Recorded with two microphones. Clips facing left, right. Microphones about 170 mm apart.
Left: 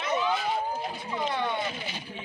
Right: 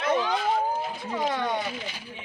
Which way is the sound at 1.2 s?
40° right (ahead or behind).